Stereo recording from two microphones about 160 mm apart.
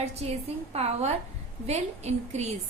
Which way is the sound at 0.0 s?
40° right (ahead or behind).